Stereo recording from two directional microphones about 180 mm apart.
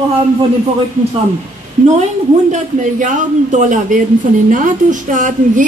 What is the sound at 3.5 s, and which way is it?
A woman's voice, 45° right (ahead or behind).